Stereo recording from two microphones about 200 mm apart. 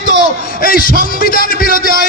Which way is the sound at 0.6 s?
45° left (ahead or behind).